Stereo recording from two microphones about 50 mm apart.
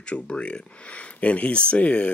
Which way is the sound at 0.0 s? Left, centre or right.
Left.